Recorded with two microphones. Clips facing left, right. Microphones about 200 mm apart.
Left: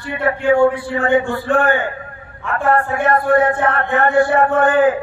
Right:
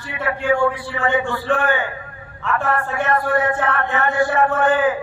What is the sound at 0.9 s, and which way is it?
A man's voice, 50° left (ahead or behind).